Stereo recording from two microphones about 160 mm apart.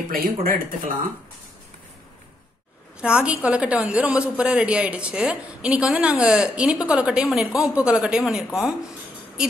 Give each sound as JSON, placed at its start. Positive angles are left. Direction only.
{"t": 0.1, "sound": "speech", "side_deg": -60}
{"t": 3.0, "sound": "a woman's voice", "side_deg": -5}